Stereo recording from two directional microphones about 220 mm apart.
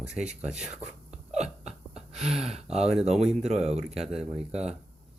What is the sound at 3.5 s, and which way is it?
Speech, 30° right (ahead or behind).